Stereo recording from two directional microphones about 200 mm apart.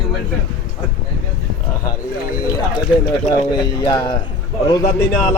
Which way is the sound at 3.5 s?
20° left (ahead or behind).